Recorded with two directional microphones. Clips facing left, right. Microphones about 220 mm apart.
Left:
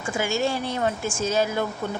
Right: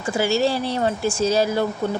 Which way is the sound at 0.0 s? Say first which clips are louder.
Right 5 dB; 35° right (ahead or behind).